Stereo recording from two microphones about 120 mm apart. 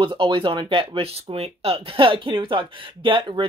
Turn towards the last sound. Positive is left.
turn(degrees=-45)  # may be behind; listen again after turning